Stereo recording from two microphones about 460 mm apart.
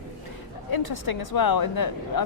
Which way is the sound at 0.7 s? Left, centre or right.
Left.